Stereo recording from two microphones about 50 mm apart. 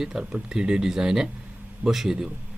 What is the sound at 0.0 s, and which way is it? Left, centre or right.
A man's voice, centre.